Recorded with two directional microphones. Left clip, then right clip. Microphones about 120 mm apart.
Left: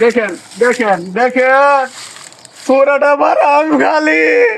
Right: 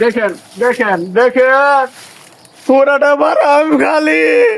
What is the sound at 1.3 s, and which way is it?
Speech, 45° right (ahead or behind).